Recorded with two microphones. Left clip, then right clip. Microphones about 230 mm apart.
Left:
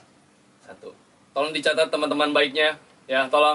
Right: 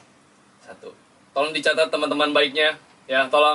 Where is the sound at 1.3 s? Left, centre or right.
Centre.